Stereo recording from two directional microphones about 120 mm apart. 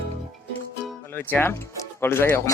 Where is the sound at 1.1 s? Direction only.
15° left (ahead or behind).